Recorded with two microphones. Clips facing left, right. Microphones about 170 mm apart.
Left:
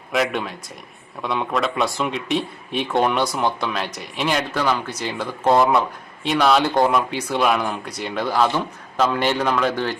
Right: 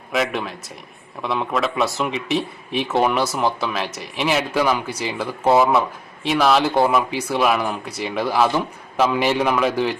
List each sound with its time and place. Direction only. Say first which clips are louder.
0.1 s speech: even; centre (ahead or behind)